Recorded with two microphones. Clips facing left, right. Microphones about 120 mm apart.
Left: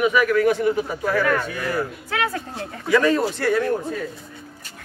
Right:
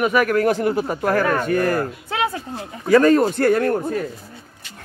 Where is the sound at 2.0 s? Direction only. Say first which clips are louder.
Right 2 dB; 25° right (ahead or behind).